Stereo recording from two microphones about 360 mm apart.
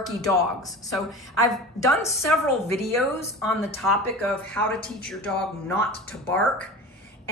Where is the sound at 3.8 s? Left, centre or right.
Centre.